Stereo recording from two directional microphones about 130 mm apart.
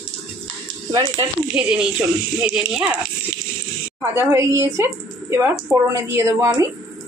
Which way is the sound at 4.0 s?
20° right (ahead or behind).